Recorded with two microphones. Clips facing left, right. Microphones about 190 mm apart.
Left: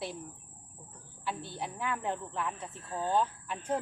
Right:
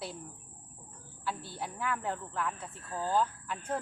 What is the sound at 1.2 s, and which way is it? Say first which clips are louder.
Speech: left 1 dB; 25° left (ahead or behind).